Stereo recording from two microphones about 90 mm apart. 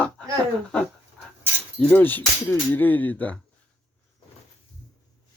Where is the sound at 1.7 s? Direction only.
15° left (ahead or behind).